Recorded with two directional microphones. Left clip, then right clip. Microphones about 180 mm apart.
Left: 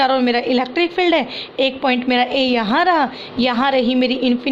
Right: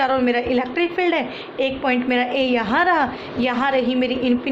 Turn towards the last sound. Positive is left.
turn(degrees=40)  # may be behind; listen again after turning